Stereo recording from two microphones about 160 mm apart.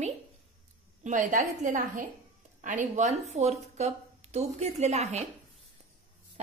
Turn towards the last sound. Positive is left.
turn(degrees=-45)  # may be behind; listen again after turning